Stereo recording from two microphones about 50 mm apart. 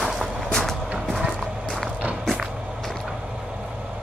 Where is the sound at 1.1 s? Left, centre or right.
Centre.